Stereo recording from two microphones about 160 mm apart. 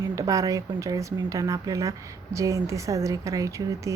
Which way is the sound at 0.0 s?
20° right (ahead or behind).